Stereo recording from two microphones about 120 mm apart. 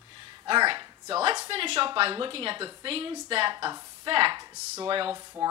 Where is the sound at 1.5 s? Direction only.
50° right (ahead or behind).